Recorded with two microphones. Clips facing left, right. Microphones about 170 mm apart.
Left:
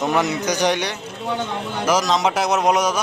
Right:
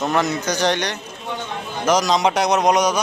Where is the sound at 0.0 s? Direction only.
15° left (ahead or behind).